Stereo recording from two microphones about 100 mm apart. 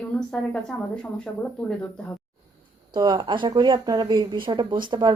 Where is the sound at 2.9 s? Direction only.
45° right (ahead or behind).